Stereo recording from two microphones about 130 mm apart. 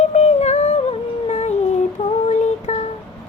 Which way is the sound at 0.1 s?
60° left (ahead or behind).